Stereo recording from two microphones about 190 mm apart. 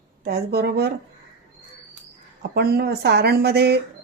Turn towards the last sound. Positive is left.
turn(degrees=-60)  # may be behind; listen again after turning